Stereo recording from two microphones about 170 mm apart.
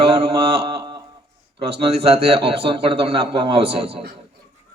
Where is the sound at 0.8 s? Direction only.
25° right (ahead or behind).